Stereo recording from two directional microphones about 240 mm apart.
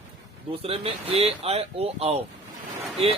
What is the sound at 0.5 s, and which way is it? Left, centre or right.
Speech, right.